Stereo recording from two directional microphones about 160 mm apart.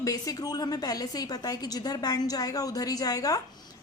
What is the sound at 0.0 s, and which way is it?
Speech, 20° left (ahead or behind).